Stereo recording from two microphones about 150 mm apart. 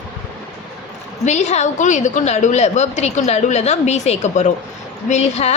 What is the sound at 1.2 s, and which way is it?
A woman's voice, 50° left (ahead or behind).